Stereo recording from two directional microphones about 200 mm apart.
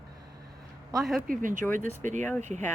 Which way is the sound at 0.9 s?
Centre (ahead or behind).